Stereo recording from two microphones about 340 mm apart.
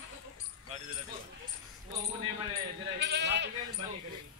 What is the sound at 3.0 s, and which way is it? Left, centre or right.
Sheep, right.